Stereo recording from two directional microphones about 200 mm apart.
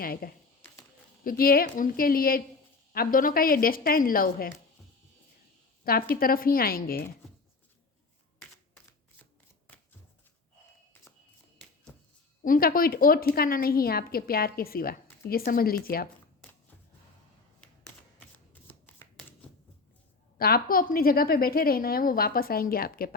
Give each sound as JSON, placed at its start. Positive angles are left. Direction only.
{"t": 0.0, "sound": "a woman's voice", "side_deg": 45}
{"t": 6.1, "sound": "a woman's voice", "side_deg": 45}
{"t": 12.4, "sound": "a woman's voice", "side_deg": 45}
{"t": 18.7, "sound": "shuffling cards", "side_deg": 10}
{"t": 20.4, "sound": "a woman's voice", "side_deg": 50}